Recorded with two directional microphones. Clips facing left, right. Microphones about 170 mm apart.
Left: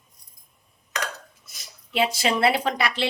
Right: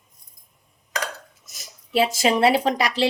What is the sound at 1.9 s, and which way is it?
Speech, 40° right (ahead or behind).